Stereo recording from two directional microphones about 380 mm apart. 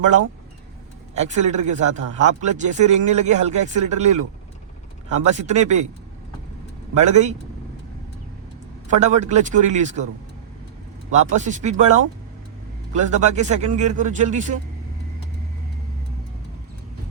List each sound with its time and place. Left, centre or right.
1.1 s speech: centre
5.2 s speech: centre
6.9 s speech: centre
9.0 s a man's voice: centre
11.1 s speech: centre